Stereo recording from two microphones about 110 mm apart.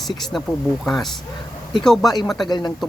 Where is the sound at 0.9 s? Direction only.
Centre (ahead or behind).